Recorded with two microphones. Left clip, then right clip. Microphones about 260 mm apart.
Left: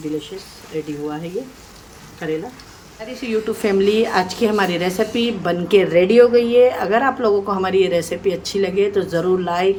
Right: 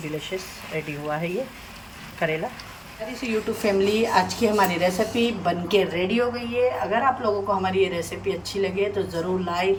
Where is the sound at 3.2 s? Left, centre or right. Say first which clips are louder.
Left 5 dB; centre.